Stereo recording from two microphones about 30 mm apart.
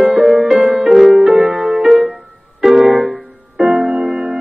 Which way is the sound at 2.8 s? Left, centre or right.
Right.